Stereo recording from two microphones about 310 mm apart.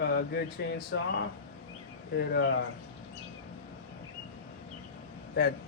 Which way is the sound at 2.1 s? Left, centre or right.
Left.